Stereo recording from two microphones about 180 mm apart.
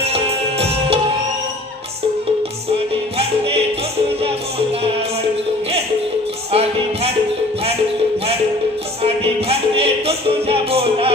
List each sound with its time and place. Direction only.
0.0 s music: 35° right (ahead or behind)
3.2 s music: 35° right (ahead or behind)
6.5 s music: 35° right (ahead or behind)
9.0 s music: 35° right (ahead or behind)